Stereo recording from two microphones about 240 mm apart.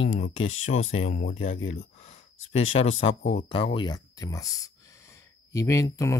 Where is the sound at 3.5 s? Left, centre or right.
Left.